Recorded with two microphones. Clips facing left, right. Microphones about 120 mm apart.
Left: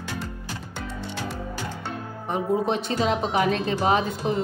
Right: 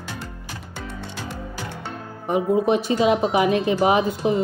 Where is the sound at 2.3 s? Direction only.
5° right (ahead or behind).